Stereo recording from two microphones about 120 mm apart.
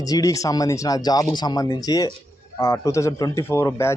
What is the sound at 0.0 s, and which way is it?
Speech, 30° left (ahead or behind).